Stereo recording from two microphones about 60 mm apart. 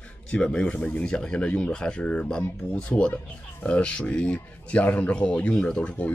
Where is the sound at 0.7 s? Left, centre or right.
Left.